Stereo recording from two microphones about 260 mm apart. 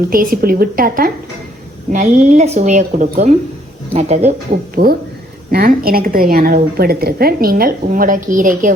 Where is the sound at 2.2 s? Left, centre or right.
Right.